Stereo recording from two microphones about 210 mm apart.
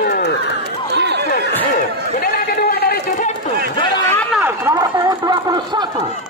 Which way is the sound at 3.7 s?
20° left (ahead or behind).